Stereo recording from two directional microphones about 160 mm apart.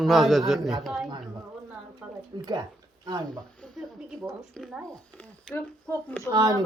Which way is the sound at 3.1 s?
25° right (ahead or behind).